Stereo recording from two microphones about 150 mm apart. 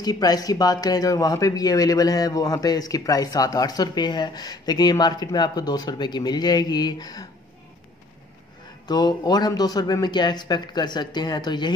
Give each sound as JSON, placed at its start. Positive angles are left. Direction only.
{"t": 0.0, "sound": "speech", "side_deg": 25}
{"t": 8.8, "sound": "speech", "side_deg": 30}